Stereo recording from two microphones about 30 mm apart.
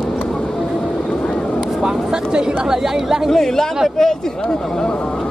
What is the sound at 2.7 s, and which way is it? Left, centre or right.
Chatter, centre.